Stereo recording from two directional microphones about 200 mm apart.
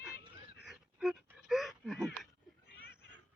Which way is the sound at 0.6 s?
Centre (ahead or behind).